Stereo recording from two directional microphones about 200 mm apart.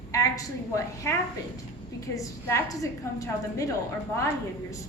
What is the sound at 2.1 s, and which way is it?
Speech, 15° left (ahead or behind).